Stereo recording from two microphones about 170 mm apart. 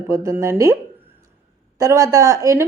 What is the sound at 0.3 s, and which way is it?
Speech, 15° right (ahead or behind).